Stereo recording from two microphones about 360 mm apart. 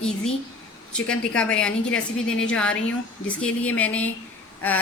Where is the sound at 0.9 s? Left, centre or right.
Centre.